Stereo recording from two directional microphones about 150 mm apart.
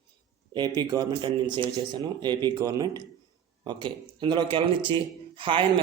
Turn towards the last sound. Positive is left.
turn(degrees=-35)  # may be behind; listen again after turning